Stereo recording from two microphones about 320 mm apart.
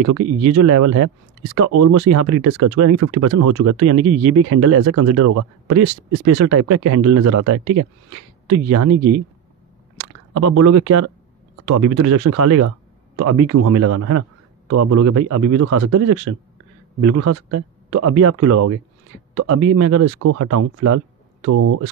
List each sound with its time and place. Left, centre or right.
0.0 s speech: right
10.3 s speech: right